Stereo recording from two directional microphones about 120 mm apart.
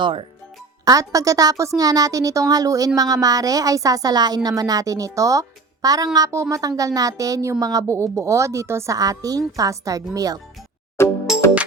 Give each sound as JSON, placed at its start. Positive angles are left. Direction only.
{"t": 0.0, "sound": "speech", "side_deg": -45}
{"t": 0.9, "sound": "a woman's voice", "side_deg": -30}
{"t": 11.0, "sound": "music", "side_deg": 20}